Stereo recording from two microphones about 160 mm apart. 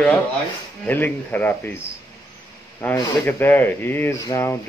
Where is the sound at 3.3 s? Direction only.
10° left (ahead or behind).